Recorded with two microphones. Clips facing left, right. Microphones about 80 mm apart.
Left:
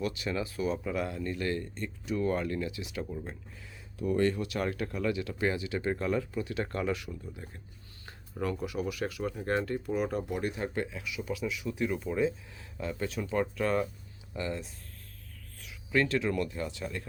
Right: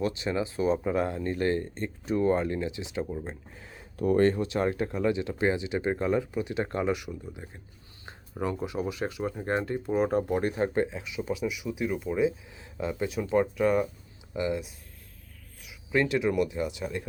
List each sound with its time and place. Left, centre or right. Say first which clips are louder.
0.0 s speech: right 4 dB; right
3.5 s speech: right 4 dB; right
4.4 s speech: right 5 dB; right
15.9 s speech: right 3 dB; centre